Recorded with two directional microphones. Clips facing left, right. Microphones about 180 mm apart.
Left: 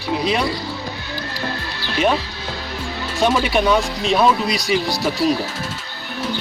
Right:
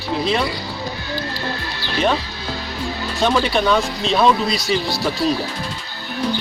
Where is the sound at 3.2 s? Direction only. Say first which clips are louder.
Even; 10° left (ahead or behind).